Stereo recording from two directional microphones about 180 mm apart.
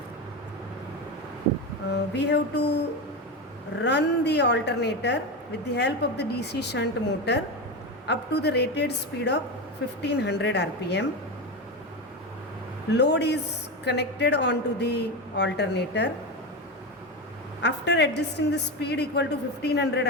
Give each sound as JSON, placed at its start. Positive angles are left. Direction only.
{"t": 2.1, "sound": "speech", "side_deg": 70}
{"t": 12.9, "sound": "speech", "side_deg": 70}
{"t": 17.6, "sound": "speech", "side_deg": 75}